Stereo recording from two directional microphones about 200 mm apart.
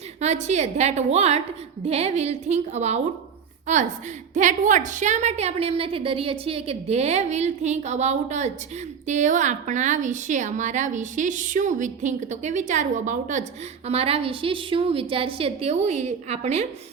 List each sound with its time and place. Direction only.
0.2 s a woman's voice: 35° right (ahead or behind)